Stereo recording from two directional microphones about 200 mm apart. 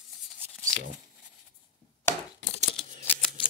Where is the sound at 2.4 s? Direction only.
35° left (ahead or behind).